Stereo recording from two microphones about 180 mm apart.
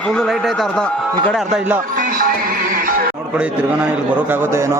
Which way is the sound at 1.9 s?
50° right (ahead or behind).